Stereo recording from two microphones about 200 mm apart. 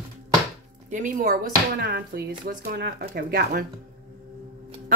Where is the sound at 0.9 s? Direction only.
40° right (ahead or behind).